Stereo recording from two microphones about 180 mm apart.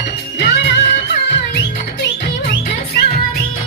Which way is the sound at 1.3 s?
70° left (ahead or behind).